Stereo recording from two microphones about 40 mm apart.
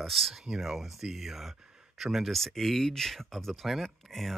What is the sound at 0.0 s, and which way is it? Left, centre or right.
Speech, centre.